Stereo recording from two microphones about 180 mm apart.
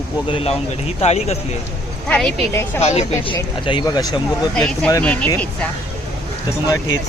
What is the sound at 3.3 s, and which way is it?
Speech, 25° left (ahead or behind).